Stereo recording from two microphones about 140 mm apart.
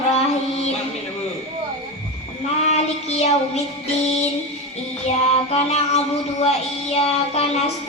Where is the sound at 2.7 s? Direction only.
50° left (ahead or behind).